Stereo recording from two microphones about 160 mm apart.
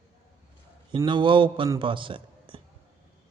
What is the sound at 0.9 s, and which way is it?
A man's voice, 30° right (ahead or behind).